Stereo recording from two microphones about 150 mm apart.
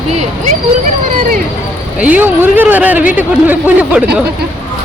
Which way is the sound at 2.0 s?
10° right (ahead or behind).